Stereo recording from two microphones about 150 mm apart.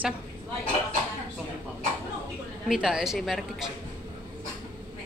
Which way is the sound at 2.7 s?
5° right (ahead or behind).